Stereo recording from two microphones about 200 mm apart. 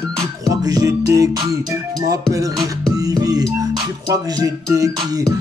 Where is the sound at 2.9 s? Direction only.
20° right (ahead or behind).